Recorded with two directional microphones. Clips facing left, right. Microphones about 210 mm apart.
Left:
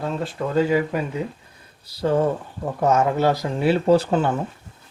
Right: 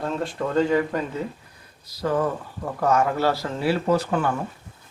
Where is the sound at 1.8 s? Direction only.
30° left (ahead or behind).